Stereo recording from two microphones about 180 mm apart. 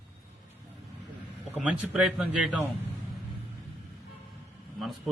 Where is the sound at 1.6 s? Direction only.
5° right (ahead or behind).